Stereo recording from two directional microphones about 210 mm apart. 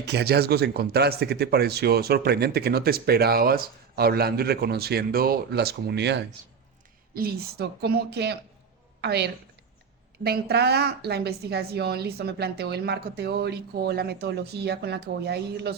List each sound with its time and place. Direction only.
0.0 s a woman's voice: 55° right (ahead or behind)